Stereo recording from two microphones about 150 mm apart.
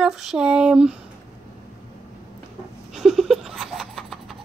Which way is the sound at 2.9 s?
Centre (ahead or behind).